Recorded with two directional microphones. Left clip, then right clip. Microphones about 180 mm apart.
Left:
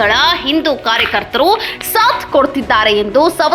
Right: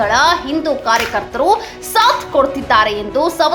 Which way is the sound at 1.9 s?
25° left (ahead or behind).